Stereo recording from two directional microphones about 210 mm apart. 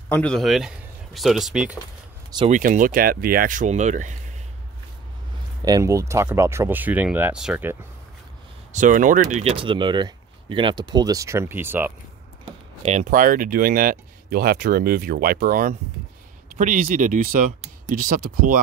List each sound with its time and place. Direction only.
0.1 s speech: 5° left (ahead or behind)
2.3 s speech: 30° right (ahead or behind)
5.7 s speech: 15° right (ahead or behind)
8.7 s speech: 40° right (ahead or behind); by 11.9 s 10° right (ahead or behind)
12.8 s speech: 35° right (ahead or behind)